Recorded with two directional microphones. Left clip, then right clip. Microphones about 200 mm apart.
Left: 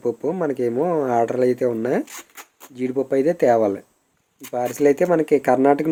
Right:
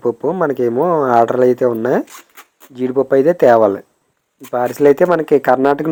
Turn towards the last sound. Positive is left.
turn(degrees=-10)  # may be behind; listen again after turning